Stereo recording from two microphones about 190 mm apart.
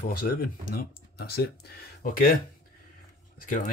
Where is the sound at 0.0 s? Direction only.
55° left (ahead or behind).